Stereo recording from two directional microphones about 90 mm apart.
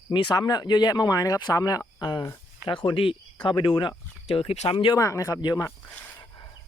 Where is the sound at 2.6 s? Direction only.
70° left (ahead or behind).